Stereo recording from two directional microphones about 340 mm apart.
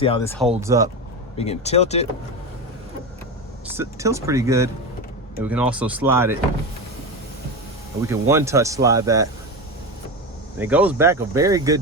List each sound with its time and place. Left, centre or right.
0.3 s speech: centre
1.4 s speech: centre
3.8 s speech: centre
8.0 s speech: centre
10.6 s speech: centre